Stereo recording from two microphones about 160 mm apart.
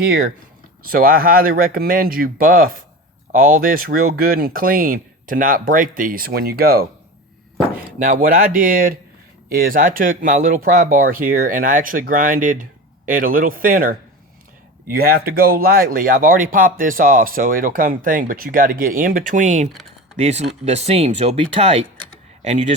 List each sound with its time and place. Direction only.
0.0 s speech: 65° right (ahead or behind)
7.9 s speech: 60° right (ahead or behind)